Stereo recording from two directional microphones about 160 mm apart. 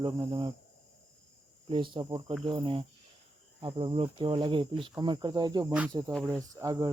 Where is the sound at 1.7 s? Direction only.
30° right (ahead or behind).